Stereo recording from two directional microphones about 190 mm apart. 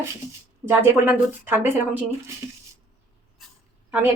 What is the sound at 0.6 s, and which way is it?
A woman's voice, 10° right (ahead or behind).